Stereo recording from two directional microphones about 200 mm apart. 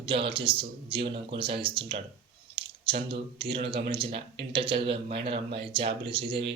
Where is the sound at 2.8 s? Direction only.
25° right (ahead or behind).